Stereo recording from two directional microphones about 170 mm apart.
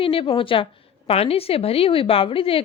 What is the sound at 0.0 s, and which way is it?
A woman's voice, 30° left (ahead or behind).